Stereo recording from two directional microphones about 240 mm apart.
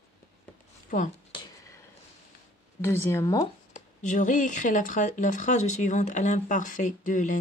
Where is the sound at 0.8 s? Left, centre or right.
Left.